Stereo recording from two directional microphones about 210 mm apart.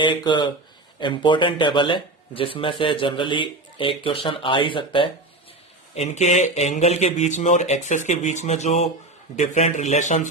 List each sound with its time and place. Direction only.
0.0 s speech: 20° left (ahead or behind)